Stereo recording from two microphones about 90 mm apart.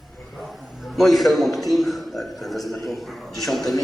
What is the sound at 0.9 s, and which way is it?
A man's voice, centre (ahead or behind).